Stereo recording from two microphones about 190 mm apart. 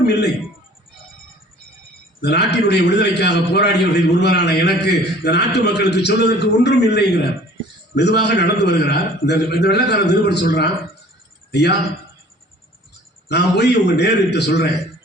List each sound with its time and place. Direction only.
2.2 s a man's voice: 60° left (ahead or behind)
13.2 s a man's voice: 60° left (ahead or behind)